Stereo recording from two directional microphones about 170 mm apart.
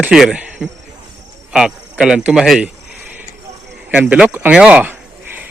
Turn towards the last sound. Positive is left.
turn(degrees=-5)  # may be behind; listen again after turning